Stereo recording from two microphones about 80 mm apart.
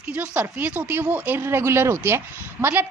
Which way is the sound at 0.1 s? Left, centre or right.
Centre.